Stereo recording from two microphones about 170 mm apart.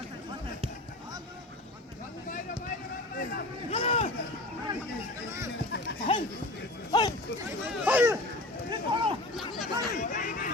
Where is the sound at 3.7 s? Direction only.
35° left (ahead or behind).